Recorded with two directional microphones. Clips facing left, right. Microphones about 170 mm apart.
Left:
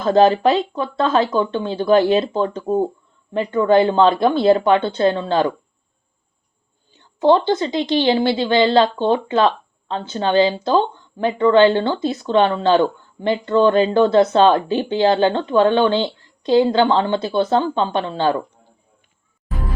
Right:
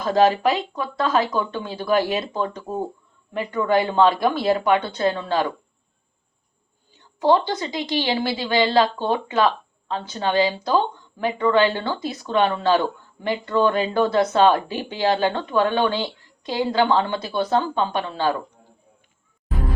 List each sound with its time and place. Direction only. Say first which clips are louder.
0.0 s speech: left 4 dB; 30° left (ahead or behind)
7.2 s speech: left 4 dB; 25° left (ahead or behind)